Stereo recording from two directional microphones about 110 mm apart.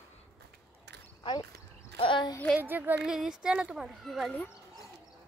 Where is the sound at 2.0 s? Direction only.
50° left (ahead or behind).